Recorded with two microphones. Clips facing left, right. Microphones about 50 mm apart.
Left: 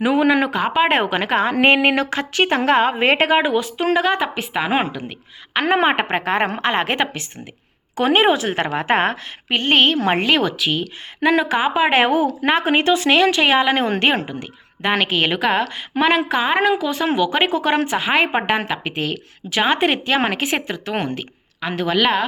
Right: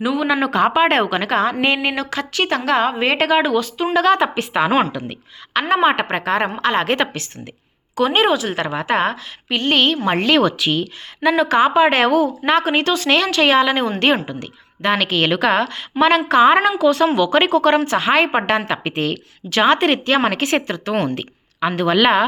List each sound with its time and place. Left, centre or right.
0.0 s a woman's voice: left
0.5 s speech: centre
0.9 s speech: left
1.6 s a woman's voice: left
3.3 s speech: left
4.2 s speech: centre
5.6 s speech: left
7.9 s a woman's voice: left
10.3 s speech: centre
11.2 s speech: left
11.9 s speech: left
16.4 s speech: centre
19.1 s speech: centre
21.2 s speech: centre